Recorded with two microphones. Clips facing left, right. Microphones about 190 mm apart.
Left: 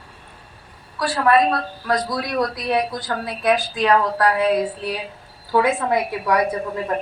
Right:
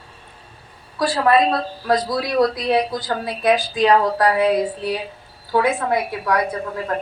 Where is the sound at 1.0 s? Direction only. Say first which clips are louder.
Right 1 dB; 35° right (ahead or behind).